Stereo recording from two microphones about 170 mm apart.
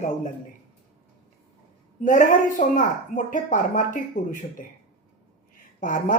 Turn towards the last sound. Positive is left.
turn(degrees=50)  # may be behind; listen again after turning